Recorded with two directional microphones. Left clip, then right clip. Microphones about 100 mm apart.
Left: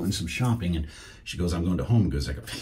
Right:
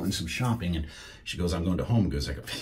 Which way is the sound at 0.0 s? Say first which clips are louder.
Left 1 dB; 20° right (ahead or behind).